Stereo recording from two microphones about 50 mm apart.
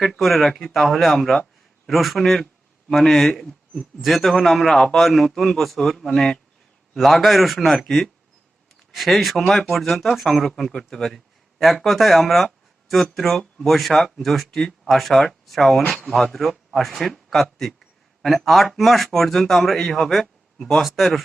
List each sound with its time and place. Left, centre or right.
0.0 s speech: centre